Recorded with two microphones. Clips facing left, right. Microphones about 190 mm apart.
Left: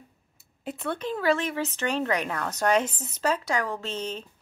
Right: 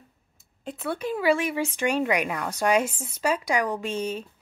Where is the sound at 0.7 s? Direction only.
5° right (ahead or behind).